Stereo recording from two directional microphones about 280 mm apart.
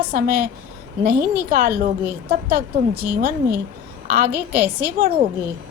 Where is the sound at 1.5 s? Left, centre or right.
Right.